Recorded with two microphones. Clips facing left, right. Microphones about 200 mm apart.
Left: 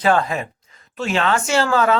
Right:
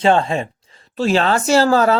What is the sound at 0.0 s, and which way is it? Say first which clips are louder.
Speech: right 3 dB; 25° right (ahead or behind).